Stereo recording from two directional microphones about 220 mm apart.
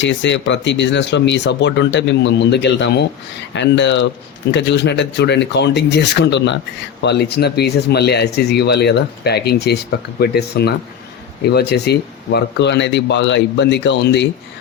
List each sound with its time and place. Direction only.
0.0 s speech: 55° left (ahead or behind)